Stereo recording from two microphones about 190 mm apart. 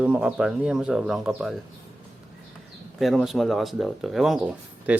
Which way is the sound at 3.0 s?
Centre (ahead or behind).